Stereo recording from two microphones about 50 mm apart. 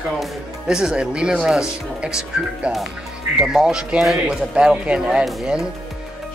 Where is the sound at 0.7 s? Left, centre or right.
Centre.